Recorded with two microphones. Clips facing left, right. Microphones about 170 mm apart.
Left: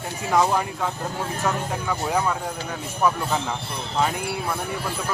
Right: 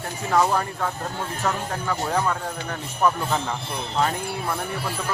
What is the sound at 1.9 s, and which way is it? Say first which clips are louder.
Speech: even; 10° left (ahead or behind).